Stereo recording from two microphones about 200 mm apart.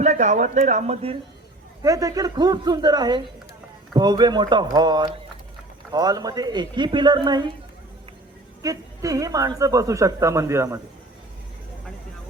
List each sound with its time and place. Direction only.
0.0 s speech: 35° right (ahead or behind)
1.8 s speech: 15° right (ahead or behind)
8.6 s a woman's voice: 15° right (ahead or behind)